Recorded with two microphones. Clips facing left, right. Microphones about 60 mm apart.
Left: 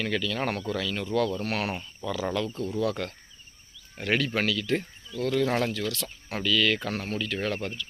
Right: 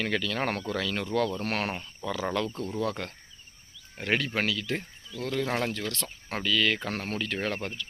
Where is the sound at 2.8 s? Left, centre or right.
Right; by 5.7 s centre.